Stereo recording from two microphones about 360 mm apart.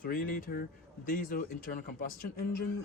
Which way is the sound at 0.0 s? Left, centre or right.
Left.